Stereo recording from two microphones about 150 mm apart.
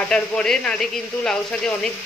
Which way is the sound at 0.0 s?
5° left (ahead or behind).